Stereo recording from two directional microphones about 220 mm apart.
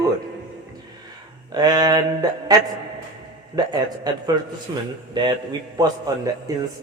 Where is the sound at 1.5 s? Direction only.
20° right (ahead or behind).